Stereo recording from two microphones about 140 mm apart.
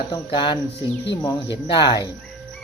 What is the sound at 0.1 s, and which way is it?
Speech, 35° left (ahead or behind).